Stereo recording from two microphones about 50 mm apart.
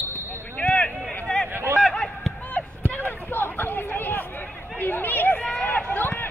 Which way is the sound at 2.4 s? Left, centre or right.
Left.